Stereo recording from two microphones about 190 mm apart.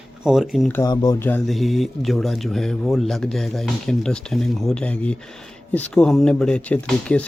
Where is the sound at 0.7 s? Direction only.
20° left (ahead or behind).